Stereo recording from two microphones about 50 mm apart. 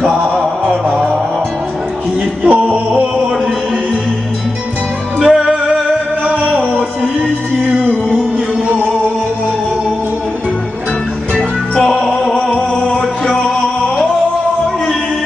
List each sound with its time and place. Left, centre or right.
0.3 s music: right
2.4 s music: right
5.2 s music: centre
6.5 s music: right
11.7 s music: centre